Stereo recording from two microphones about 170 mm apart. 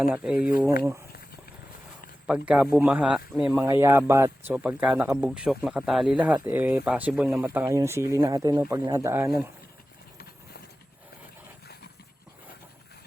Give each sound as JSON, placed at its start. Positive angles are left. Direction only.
{"t": 0.0, "sound": "speech", "side_deg": -10}
{"t": 2.5, "sound": "speech", "side_deg": -5}
{"t": 3.7, "sound": "speech", "side_deg": -15}